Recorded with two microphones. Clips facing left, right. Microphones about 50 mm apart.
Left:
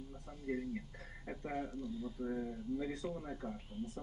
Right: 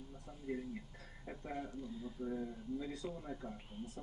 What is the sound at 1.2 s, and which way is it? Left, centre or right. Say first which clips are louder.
Speech: left 3 dB; left.